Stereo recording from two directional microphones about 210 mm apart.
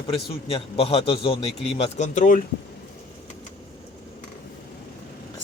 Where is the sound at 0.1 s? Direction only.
25° left (ahead or behind).